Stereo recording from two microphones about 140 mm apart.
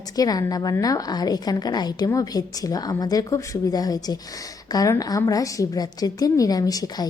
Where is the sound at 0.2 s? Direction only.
25° left (ahead or behind).